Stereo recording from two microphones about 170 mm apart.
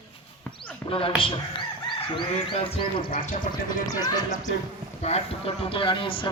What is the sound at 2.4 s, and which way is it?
Speech, 30° left (ahead or behind).